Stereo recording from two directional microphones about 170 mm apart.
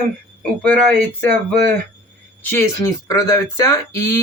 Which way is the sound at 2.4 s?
15° left (ahead or behind).